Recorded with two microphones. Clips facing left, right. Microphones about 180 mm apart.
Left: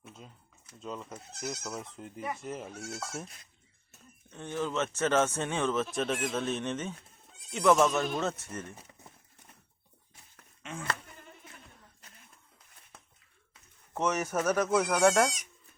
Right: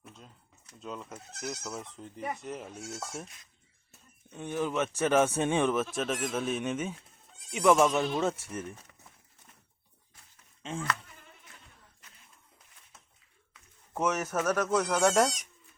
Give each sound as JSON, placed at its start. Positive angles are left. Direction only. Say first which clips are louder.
{"t": 0.7, "sound": "speech", "louder": "left 1 dB", "side_deg": 0}
{"t": 4.3, "sound": "speech", "louder": "right 2 dB", "side_deg": -10}
{"t": 5.8, "sound": "speech", "louder": "even", "side_deg": -5}
{"t": 10.6, "sound": "speech", "louder": "right 4 dB", "side_deg": -30}
{"t": 13.9, "sound": "speech", "louder": "even", "side_deg": -5}
{"t": 14.3, "sound": "speech", "louder": "left 2 dB", "side_deg": 10}